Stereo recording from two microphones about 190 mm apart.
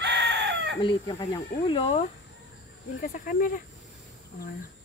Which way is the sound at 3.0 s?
45° left (ahead or behind).